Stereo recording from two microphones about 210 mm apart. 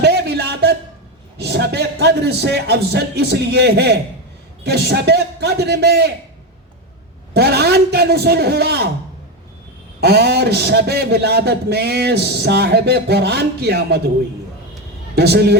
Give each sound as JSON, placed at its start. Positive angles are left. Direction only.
{"t": 0.0, "sound": "a sound", "side_deg": -50}
{"t": 1.4, "sound": "a man's voice", "side_deg": -55}
{"t": 7.3, "sound": "a man's voice", "side_deg": -50}
{"t": 10.0, "sound": "a man's voice", "side_deg": -50}
{"t": 15.1, "sound": "a man's voice", "side_deg": -50}